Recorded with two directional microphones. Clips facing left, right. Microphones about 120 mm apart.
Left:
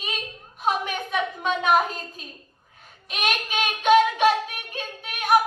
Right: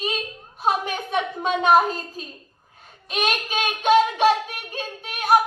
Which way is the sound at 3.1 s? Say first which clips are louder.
Right 2 dB; 35° right (ahead or behind).